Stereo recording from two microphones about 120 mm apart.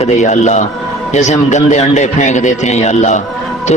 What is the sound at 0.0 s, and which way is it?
Speech, 75° left (ahead or behind).